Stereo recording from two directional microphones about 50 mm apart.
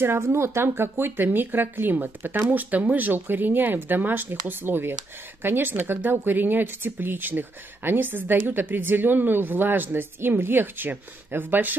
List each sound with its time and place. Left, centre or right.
0.0 s speech: right